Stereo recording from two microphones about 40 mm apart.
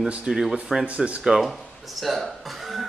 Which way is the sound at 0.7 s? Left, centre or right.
Centre.